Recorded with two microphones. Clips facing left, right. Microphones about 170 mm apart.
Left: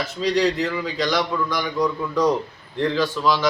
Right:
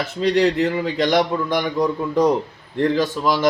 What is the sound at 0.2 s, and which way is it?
A man's voice, 55° right (ahead or behind).